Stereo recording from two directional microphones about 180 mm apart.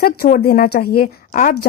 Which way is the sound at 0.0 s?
55° left (ahead or behind).